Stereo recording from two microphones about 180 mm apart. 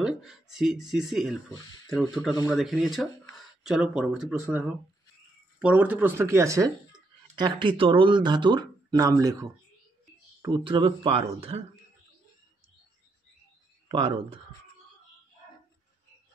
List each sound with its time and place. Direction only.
0.0 s speech: centre (ahead or behind)
2.5 s speech: centre (ahead or behind); by 11.6 s 35° right (ahead or behind)
13.8 s speech: 30° right (ahead or behind)